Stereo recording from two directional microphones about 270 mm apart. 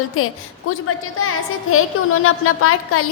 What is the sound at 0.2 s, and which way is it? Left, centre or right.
A woman's voice, left.